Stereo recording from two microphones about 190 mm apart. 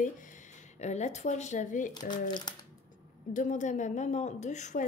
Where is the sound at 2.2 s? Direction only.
20° left (ahead or behind).